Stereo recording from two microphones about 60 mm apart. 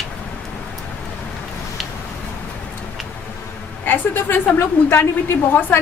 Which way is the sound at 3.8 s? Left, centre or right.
Left.